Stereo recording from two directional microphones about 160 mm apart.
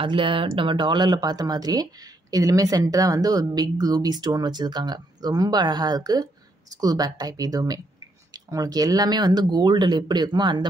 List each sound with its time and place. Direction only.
0.0 s speech: 30° right (ahead or behind)